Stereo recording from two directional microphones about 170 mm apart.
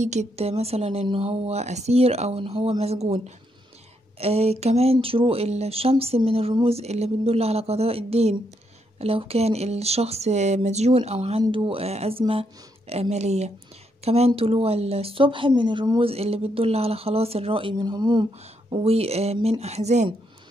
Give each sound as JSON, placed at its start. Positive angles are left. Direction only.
{"t": 0.0, "sound": "speech", "side_deg": -40}
{"t": 4.2, "sound": "speech", "side_deg": -35}
{"t": 18.7, "sound": "speech", "side_deg": -35}